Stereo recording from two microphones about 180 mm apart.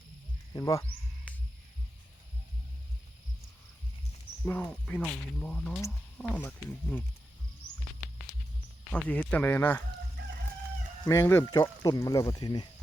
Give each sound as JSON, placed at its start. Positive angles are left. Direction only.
{"t": 0.5, "sound": "cricket", "side_deg": 15}
{"t": 4.4, "sound": "speech", "side_deg": 10}
{"t": 8.9, "sound": "speech", "side_deg": 10}
{"t": 11.0, "sound": "speech", "side_deg": 15}